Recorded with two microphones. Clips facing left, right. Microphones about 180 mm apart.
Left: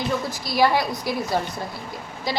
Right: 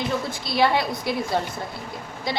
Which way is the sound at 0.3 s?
25° right (ahead or behind).